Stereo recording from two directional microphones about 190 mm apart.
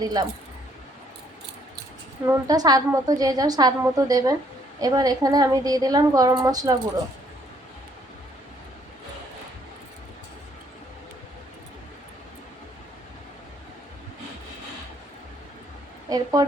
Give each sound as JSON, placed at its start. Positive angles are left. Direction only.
{"t": 0.0, "sound": "a woman's voice", "side_deg": -20}
{"t": 2.2, "sound": "a woman's voice", "side_deg": -15}
{"t": 16.0, "sound": "a woman's voice", "side_deg": -20}